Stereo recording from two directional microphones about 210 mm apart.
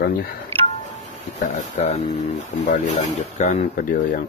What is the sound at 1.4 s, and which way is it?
Speech, 35° left (ahead or behind).